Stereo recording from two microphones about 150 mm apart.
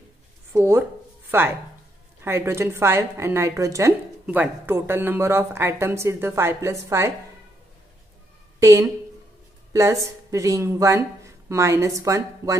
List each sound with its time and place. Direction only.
0.5 s a woman's voice: 15° right (ahead or behind)
8.5 s speech: 20° right (ahead or behind)
9.7 s a sound: 20° right (ahead or behind)
10.3 s speech: 20° right (ahead or behind)